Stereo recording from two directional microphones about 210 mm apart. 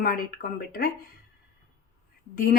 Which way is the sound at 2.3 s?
40° left (ahead or behind).